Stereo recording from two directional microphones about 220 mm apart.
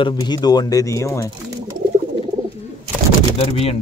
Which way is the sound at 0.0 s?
20° left (ahead or behind).